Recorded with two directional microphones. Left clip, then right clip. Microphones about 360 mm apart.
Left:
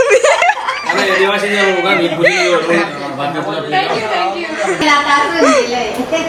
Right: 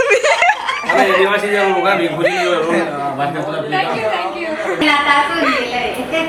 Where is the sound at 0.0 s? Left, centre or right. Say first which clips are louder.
Left 3 dB; centre.